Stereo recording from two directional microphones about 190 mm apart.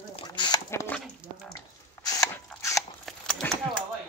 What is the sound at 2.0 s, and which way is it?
Mechanisms, 20° left (ahead or behind).